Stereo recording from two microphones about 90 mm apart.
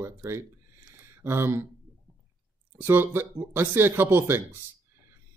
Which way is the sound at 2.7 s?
25° right (ahead or behind).